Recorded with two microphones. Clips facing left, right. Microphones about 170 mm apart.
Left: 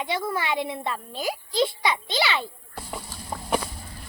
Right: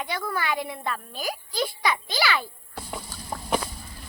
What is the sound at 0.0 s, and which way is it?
A child's voice, 25° left (ahead or behind).